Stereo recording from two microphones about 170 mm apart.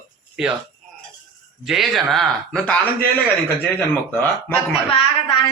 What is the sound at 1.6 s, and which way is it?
Speech, centre (ahead or behind).